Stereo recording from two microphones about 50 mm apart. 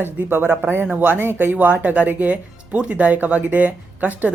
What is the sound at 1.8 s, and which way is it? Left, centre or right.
Speech, right.